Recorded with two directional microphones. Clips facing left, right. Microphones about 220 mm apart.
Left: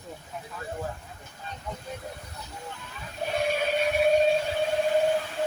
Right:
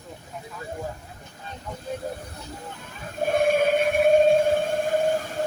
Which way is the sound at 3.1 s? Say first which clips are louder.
Right 7 dB; 50° right (ahead or behind).